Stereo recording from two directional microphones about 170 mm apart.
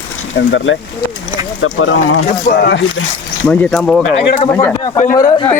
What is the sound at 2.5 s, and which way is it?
Speech, 85° left.